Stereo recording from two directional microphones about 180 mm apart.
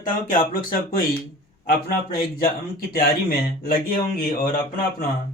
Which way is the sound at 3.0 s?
55° left (ahead or behind).